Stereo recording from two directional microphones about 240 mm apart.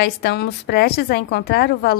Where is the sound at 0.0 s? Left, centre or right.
Left.